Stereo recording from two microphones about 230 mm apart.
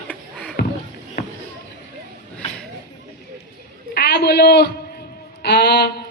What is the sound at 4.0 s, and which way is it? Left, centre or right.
A man's voice, left.